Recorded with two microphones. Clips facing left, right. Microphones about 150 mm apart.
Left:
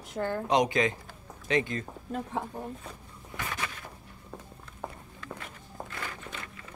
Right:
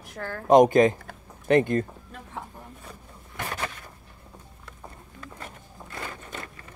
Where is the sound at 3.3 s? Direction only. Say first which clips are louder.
Right 3 dB; 55° right (ahead or behind).